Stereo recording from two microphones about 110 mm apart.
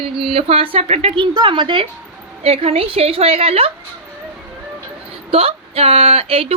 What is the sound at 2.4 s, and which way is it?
Speech, 65° right (ahead or behind).